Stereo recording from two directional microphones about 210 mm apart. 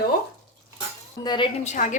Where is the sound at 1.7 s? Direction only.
35° left (ahead or behind).